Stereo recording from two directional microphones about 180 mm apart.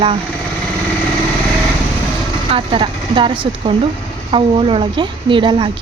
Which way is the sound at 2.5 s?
30° right (ahead or behind).